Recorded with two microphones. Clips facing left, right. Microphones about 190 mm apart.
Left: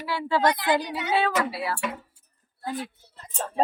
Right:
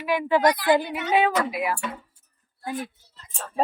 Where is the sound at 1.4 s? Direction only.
15° right (ahead or behind).